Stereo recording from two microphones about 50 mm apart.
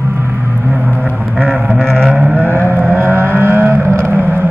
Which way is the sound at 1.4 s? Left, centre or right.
Right.